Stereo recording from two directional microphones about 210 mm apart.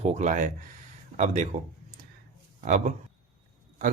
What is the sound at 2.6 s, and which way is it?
Speech, 35° right (ahead or behind).